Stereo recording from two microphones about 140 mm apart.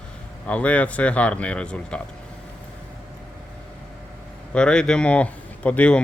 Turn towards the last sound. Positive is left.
turn(degrees=10)  # may be behind; listen again after turning